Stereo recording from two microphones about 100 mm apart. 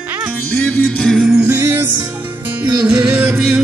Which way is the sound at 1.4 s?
25° right (ahead or behind).